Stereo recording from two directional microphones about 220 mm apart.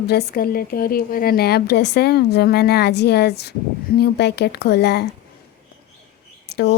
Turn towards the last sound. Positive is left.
turn(degrees=50)  # may be behind; listen again after turning